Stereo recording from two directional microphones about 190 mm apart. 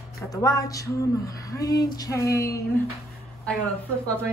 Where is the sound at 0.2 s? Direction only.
20° left (ahead or behind).